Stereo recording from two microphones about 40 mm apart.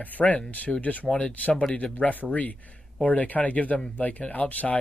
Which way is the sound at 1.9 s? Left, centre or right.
Left.